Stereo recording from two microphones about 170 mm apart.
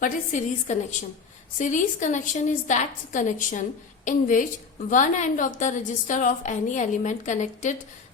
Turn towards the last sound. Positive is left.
turn(degrees=45)  # may be behind; listen again after turning